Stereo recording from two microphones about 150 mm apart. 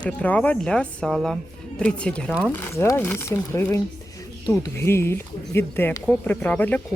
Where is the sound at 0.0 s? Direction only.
10° left (ahead or behind).